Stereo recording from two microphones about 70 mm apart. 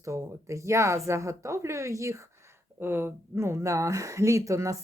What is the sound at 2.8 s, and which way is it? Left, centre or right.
Speech, right.